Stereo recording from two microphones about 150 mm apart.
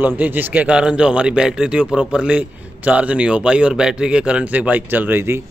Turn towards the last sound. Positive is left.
turn(degrees=-15)  # may be behind; listen again after turning